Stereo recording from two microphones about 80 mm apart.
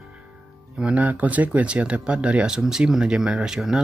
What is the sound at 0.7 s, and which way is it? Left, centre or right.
Speech, centre.